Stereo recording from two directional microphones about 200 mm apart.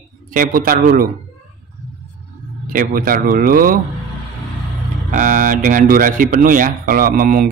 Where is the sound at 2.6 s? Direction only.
45° right (ahead or behind).